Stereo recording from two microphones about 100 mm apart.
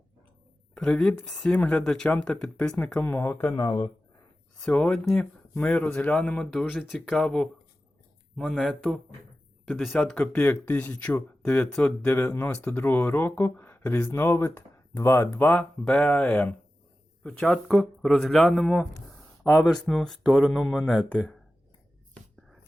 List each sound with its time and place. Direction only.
0.7 s speech: 10° left (ahead or behind)
3.5 s speech: 45° left (ahead or behind)
4.6 s speech: 10° left (ahead or behind)
21.1 s speech: 10° left (ahead or behind)